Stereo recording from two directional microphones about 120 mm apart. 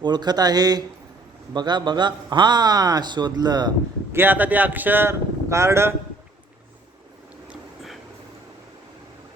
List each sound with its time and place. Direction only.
0.0 s a man's voice: 35° right (ahead or behind)
4.1 s speech: 15° right (ahead or behind)